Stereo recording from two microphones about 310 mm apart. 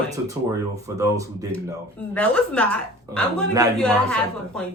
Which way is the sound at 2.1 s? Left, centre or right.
Centre.